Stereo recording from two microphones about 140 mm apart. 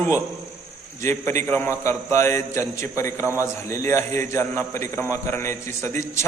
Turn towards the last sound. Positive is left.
turn(degrees=20)  # may be behind; listen again after turning